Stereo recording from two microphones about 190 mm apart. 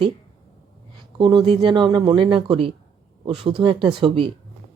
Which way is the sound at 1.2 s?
25° right (ahead or behind).